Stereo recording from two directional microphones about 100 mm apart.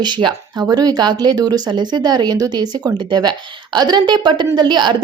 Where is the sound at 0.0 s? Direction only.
50° right (ahead or behind).